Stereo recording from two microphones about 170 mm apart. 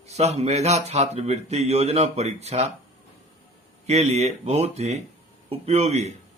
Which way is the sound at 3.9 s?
40° right (ahead or behind).